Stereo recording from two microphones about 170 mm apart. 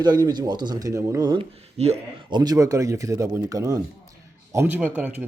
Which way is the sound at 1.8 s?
40° right (ahead or behind).